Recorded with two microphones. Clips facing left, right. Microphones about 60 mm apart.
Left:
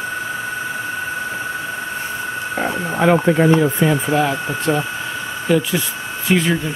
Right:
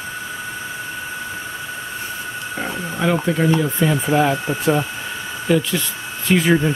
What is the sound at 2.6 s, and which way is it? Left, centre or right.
Speech, left.